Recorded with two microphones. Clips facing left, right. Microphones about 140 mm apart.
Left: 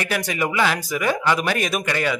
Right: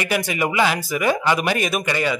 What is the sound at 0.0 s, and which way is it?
Speech, 5° right (ahead or behind).